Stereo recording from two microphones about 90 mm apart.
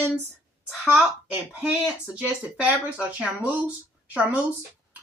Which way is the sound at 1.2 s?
15° right (ahead or behind).